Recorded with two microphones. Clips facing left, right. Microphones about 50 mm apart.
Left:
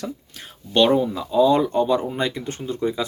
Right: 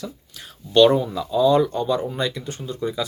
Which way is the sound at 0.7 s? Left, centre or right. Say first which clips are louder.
Right 2 dB; left.